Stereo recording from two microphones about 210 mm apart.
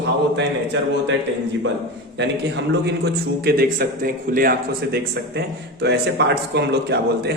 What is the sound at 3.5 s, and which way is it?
A man's voice, 45° right (ahead or behind).